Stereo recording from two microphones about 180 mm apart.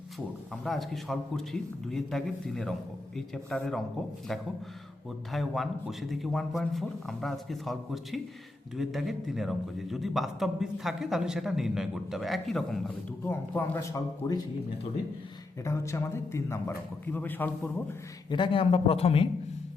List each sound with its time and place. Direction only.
0.6 s a man's voice: centre (ahead or behind)
5.3 s a man's voice: centre (ahead or behind); by 14.3 s 15° left (ahead or behind)
15.6 s a man's voice: 15° left (ahead or behind)
18.3 s a man's voice: 25° left (ahead or behind)